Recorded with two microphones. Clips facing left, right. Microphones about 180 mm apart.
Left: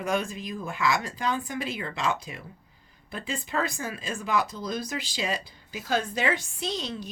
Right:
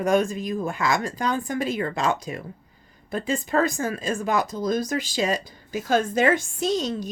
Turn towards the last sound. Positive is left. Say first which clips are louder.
# right 8 dB
turn(degrees=-45)  # may be behind; listen again after turning